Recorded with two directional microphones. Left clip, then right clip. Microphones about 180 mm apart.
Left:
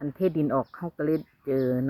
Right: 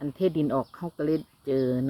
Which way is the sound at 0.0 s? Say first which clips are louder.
Even; 35° left (ahead or behind).